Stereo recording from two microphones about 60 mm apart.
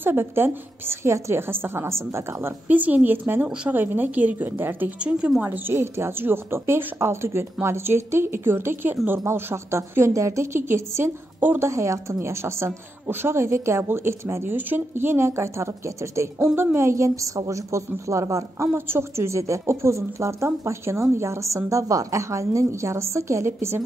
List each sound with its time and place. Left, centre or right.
0.0 s a woman's voice: right
2.7 s a woman's voice: right
4.5 s speech: right
4.9 s a woman's voice: right
5.4 s a woman's voice: right
11.6 s a woman's voice: right
14.5 s a woman's voice: right
18.8 s a woman's voice: right